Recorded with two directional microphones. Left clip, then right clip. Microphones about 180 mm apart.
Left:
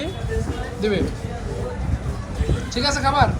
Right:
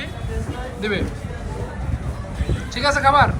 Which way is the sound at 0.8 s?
15° left (ahead or behind).